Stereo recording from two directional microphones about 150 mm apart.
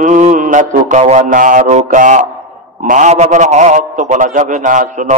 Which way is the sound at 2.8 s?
55° right (ahead or behind).